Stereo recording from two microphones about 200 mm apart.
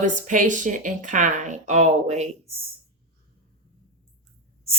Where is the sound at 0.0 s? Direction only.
40° right (ahead or behind).